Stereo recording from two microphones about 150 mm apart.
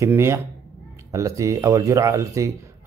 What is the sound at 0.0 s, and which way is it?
A man's voice, 20° right (ahead or behind).